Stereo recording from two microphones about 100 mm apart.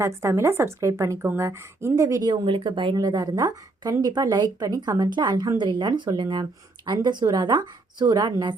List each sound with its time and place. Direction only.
0.0 s a woman's voice: 30° right (ahead or behind)
2.2 s speech: 50° right (ahead or behind)
2.9 s speech: 40° right (ahead or behind)